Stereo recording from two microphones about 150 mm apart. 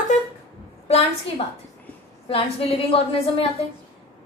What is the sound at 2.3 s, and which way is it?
A woman's voice, 40° left (ahead or behind).